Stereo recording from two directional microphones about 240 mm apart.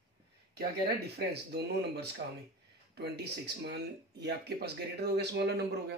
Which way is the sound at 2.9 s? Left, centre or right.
Right.